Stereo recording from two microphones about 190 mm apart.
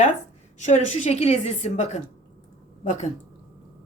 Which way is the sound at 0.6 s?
35° left (ahead or behind).